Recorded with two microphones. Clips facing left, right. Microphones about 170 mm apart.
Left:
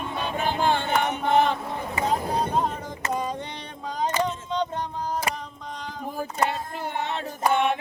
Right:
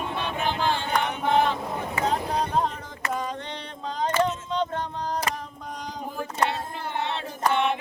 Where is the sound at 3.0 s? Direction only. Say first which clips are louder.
Left 1 dB; 15° left (ahead or behind).